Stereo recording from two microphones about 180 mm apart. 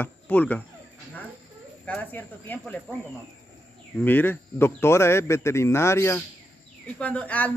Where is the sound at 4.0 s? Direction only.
10° left (ahead or behind).